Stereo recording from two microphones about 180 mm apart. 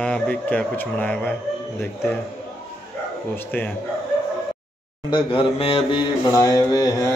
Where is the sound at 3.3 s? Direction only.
10° left (ahead or behind).